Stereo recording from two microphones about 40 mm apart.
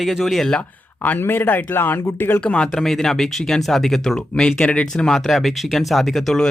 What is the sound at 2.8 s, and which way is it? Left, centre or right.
Speech, centre.